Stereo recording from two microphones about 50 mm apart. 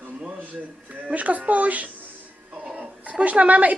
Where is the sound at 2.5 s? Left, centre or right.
Right.